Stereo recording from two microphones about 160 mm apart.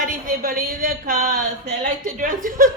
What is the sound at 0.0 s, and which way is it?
A woman's voice, 60° right (ahead or behind).